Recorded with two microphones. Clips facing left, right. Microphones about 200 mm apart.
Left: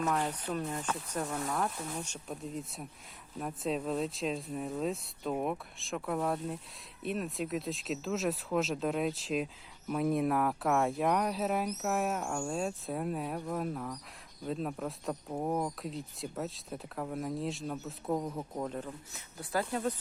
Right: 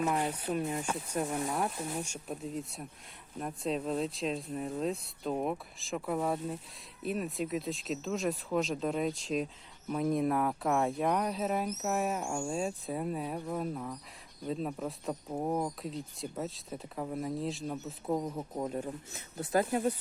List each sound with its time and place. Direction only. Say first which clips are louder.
0.0 s speech: right 1 dB; 10° right (ahead or behind)
18.9 s speech: right 4 dB; 25° right (ahead or behind)